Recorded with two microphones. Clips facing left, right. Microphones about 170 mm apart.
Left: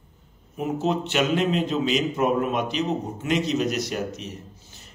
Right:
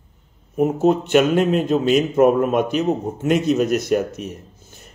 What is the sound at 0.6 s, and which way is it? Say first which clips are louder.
A man's voice: right 8 dB; 50° right (ahead or behind).